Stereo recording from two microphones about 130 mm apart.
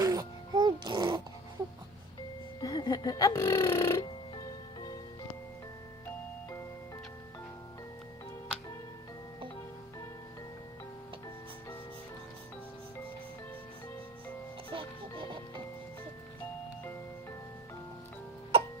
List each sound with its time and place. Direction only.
0.0 s music: 30° right (ahead or behind)
2.6 s music: 30° left (ahead or behind)
14.7 s music: 40° right (ahead or behind)